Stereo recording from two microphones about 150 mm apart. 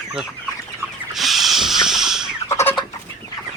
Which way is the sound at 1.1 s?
Centre (ahead or behind).